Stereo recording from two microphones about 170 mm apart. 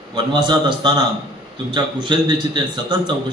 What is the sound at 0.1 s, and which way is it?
A man's voice, 25° right (ahead or behind).